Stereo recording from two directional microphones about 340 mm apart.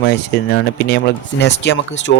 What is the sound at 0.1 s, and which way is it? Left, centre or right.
Speech, left.